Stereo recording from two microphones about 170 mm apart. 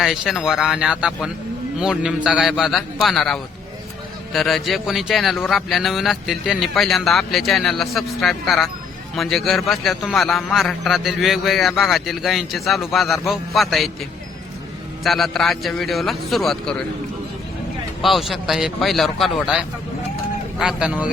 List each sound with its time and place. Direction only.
0.0 s a man's voice: centre (ahead or behind)
15.0 s a man's voice: centre (ahead or behind)
18.0 s a man's voice: centre (ahead or behind)